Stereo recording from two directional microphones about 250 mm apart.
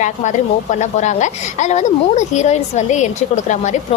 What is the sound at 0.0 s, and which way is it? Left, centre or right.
A woman's voice, left.